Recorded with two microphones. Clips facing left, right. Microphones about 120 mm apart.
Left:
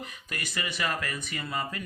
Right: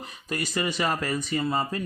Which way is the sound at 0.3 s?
35° right (ahead or behind).